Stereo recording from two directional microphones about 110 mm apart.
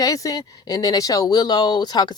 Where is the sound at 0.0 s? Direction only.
30° left (ahead or behind).